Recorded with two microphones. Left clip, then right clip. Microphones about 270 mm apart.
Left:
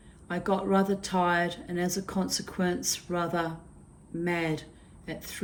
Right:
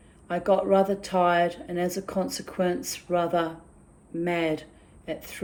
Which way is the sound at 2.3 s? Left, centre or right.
Right.